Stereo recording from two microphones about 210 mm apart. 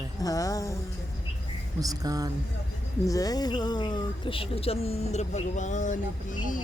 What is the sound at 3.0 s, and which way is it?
A woman's voice, 15° left (ahead or behind).